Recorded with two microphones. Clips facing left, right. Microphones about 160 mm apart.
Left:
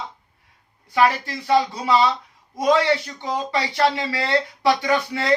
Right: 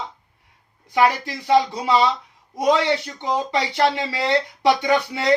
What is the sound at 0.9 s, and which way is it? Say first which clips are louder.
Speech: even; 20° right (ahead or behind).